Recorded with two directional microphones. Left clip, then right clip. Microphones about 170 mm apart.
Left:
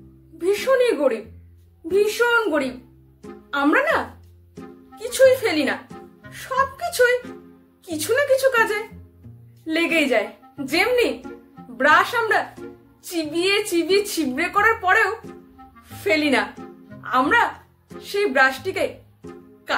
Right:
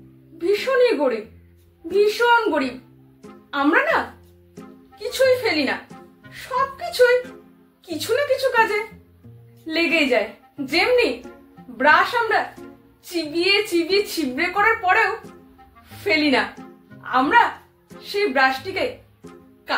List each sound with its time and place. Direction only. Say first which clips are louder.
0.4 s a woman's voice: right 1 dB; 15° left (ahead or behind)
2.0 s a woman's voice: right 2 dB; 15° left (ahead or behind)